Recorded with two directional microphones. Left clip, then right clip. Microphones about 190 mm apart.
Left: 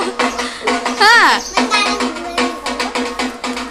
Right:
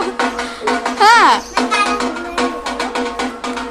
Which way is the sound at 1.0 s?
Centre (ahead or behind).